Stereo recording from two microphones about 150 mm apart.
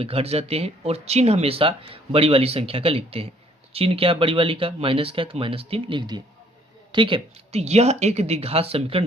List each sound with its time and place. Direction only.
0.0 s speech: 40° right (ahead or behind)